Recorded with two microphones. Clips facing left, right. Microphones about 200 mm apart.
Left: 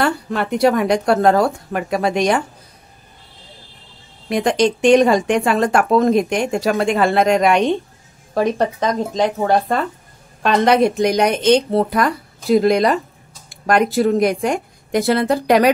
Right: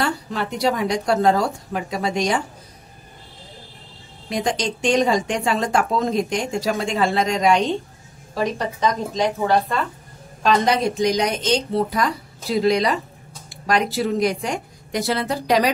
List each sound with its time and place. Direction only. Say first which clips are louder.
0.0 s speech: left 5 dB; 60° left (ahead or behind)
4.3 s speech: left 7 dB; 60° left (ahead or behind)